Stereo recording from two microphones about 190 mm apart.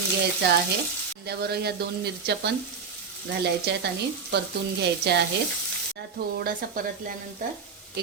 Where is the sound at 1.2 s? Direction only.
55° right (ahead or behind).